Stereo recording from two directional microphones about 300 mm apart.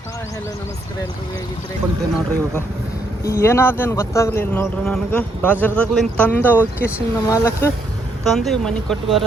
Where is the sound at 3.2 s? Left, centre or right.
Centre.